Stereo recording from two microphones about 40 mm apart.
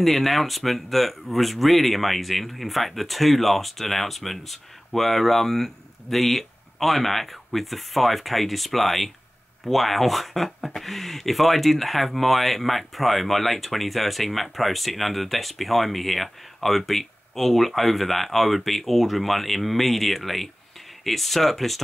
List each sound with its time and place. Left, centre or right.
0.0 s speech: centre